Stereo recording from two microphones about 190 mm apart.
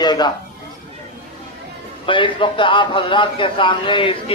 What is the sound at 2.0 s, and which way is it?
A man's voice, 25° left (ahead or behind).